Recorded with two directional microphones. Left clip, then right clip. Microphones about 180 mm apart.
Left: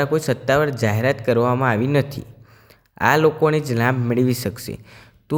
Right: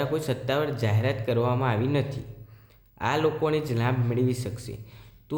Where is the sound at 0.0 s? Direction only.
40° left (ahead or behind).